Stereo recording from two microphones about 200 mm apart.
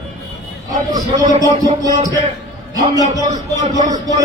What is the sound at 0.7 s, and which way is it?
A man's voice, 20° right (ahead or behind).